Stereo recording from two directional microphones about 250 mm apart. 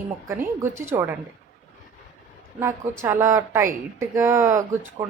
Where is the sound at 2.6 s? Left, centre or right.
Centre.